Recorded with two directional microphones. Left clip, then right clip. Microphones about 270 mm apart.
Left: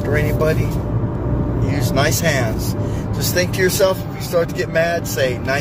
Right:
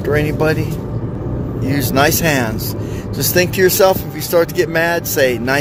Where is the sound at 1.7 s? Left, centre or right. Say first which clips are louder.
Right 5 dB; right.